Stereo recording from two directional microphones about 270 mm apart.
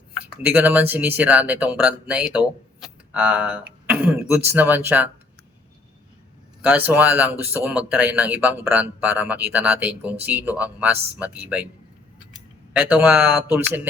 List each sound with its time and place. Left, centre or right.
0.4 s speech: centre
6.6 s speech: centre
12.7 s speech: centre